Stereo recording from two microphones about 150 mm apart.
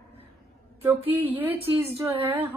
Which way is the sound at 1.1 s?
10° right (ahead or behind).